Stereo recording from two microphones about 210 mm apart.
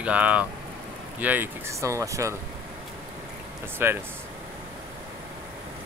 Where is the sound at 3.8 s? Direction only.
10° right (ahead or behind).